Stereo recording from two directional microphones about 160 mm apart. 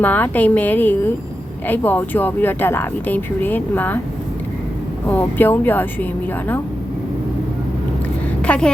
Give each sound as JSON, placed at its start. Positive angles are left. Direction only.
{"t": 0.0, "sound": "speech", "side_deg": 10}
{"t": 5.0, "sound": "speech", "side_deg": 10}
{"t": 8.4, "sound": "speech", "side_deg": 5}